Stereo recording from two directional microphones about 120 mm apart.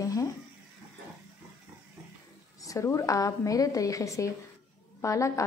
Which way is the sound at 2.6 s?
25° left (ahead or behind).